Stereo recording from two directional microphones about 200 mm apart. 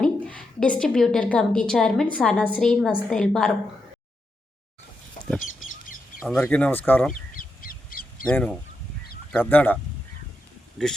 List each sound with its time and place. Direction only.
0.0 s a woman's voice: 5° left (ahead or behind)
5.2 s chicken: 40° left (ahead or behind)
6.2 s speech: 10° left (ahead or behind)
7.1 s crow: 45° left (ahead or behind)
8.3 s speech: 5° left (ahead or behind)